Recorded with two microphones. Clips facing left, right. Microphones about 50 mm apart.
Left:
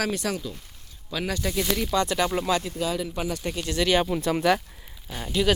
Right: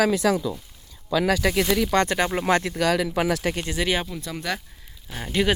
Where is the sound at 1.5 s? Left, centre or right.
Right.